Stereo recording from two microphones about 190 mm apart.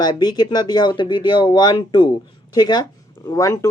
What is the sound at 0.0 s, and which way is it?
Speech, 20° left (ahead or behind).